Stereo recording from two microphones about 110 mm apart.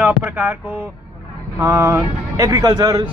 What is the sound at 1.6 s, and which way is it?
Speech, 25° right (ahead or behind).